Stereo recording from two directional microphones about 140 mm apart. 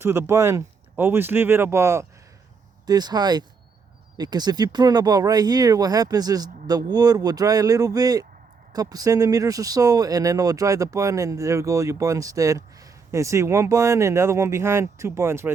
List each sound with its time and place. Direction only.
0.0 s speech: 20° right (ahead or behind)